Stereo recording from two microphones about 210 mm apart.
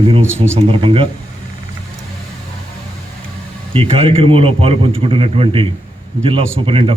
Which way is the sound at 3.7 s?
25° right (ahead or behind).